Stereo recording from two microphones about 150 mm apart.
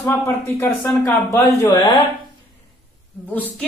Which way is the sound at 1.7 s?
30° left (ahead or behind).